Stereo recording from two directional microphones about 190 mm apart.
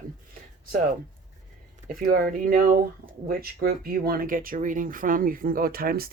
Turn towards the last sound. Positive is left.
turn(degrees=-50)  # may be behind; listen again after turning